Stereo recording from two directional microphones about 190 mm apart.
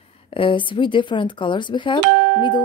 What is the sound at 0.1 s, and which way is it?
A woman's voice, 30° left (ahead or behind).